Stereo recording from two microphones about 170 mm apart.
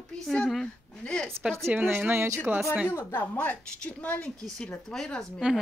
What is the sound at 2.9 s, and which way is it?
A woman's voice, 10° left (ahead or behind).